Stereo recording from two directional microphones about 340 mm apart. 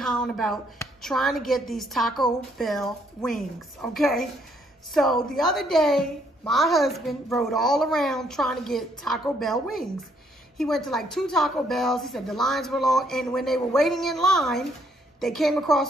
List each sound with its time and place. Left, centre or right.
0.0 s a woman's voice: centre